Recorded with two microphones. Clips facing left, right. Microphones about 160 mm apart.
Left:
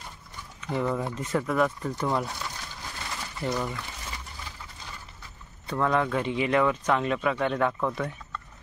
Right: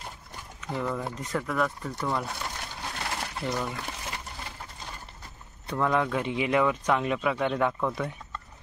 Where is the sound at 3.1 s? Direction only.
70° right (ahead or behind).